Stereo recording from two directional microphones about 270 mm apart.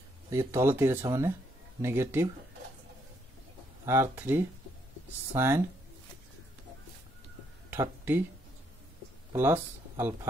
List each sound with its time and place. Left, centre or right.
0.3 s speech: centre
3.8 s speech: centre
7.7 s speech: centre
9.3 s speech: centre